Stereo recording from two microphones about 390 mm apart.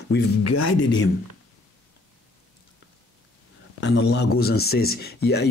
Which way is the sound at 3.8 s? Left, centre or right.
Left.